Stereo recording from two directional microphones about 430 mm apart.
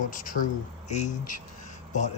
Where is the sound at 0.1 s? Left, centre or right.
Centre.